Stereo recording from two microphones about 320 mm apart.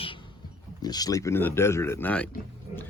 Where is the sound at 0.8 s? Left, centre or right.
Centre.